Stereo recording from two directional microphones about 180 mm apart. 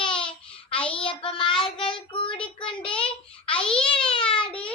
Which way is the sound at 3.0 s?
30° left (ahead or behind).